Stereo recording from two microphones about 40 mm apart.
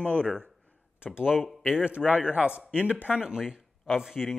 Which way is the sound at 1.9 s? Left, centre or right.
Right.